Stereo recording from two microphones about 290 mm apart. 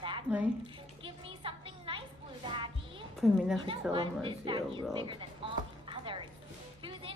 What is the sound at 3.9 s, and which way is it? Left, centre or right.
Speech, centre.